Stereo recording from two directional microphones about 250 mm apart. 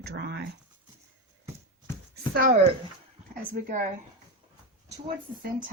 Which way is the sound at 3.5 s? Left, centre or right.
Right.